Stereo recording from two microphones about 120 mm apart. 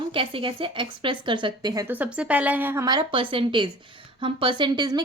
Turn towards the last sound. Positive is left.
turn(degrees=-35)  # may be behind; listen again after turning